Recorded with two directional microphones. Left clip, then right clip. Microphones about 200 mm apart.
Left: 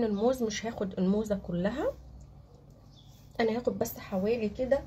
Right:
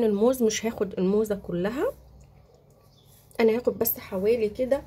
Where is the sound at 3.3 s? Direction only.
35° right (ahead or behind).